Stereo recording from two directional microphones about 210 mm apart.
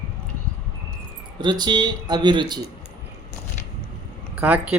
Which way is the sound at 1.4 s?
20° right (ahead or behind).